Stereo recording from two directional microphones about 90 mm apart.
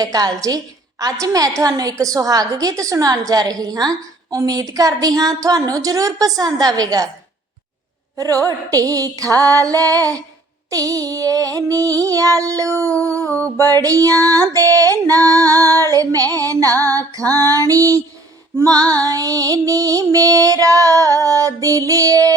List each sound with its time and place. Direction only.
0.0 s a woman's voice: 45° right (ahead or behind)
8.1 s a woman's voice: 40° right (ahead or behind)
18.5 s music: 25° right (ahead or behind)
18.9 s a woman's voice: 40° right (ahead or behind)